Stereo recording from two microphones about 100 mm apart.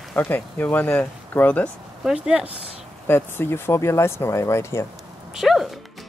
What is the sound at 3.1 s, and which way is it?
Speech, 25° left (ahead or behind).